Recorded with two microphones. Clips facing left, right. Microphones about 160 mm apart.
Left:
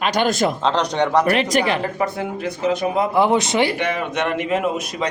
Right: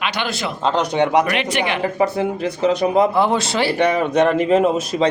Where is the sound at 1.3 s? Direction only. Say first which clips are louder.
Left 3 dB; 40° left (ahead or behind).